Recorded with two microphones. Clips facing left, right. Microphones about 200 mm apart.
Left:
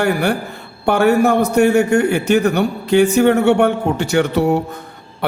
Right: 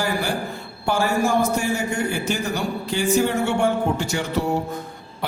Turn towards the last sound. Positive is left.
turn(degrees=65)  # may be behind; listen again after turning